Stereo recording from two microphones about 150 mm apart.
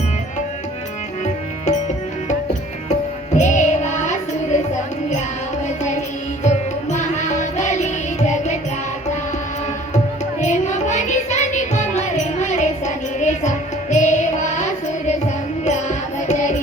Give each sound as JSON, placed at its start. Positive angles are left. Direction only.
{"t": 3.3, "sound": "music", "side_deg": 55}
{"t": 6.4, "sound": "music", "side_deg": 50}
{"t": 10.4, "sound": "music", "side_deg": 55}